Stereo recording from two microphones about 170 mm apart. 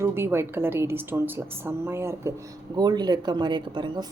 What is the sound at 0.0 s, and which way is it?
Speech, 15° right (ahead or behind).